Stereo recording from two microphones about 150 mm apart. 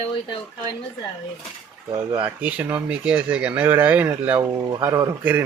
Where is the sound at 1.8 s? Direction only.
30° right (ahead or behind).